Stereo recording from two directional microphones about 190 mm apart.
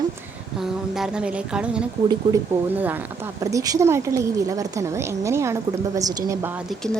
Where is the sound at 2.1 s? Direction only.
20° right (ahead or behind).